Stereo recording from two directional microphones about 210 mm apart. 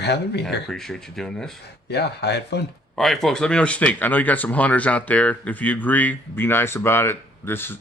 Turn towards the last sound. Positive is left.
turn(degrees=10)  # may be behind; listen again after turning